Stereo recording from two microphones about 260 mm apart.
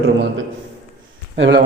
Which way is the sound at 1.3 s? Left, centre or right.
Right.